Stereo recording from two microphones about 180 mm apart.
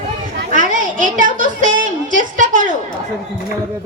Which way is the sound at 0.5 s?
45° right (ahead or behind).